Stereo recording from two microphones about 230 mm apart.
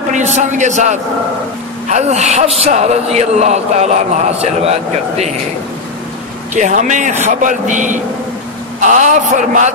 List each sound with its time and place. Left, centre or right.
0.1 s a man's voice: right
6.5 s speech: right